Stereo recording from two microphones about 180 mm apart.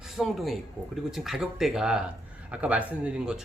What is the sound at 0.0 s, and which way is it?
Speech, centre (ahead or behind).